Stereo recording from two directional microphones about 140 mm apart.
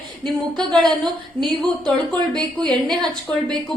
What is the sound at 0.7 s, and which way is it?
Speech, 30° right (ahead or behind).